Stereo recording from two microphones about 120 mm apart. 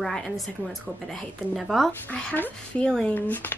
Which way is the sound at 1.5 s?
Centre (ahead or behind).